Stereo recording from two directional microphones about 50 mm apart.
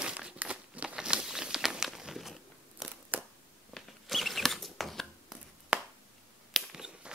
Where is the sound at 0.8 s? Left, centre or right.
Centre.